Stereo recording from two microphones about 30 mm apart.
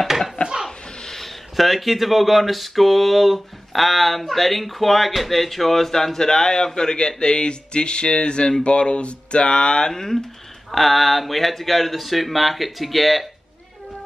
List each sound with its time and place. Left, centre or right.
0.7 s a sound: left
1.1 s speech: centre; by 9.9 s left
9.9 s speech: centre
10.7 s speech: centre